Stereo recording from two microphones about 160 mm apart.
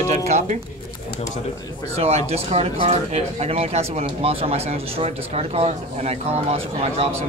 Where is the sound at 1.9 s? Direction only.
40° right (ahead or behind).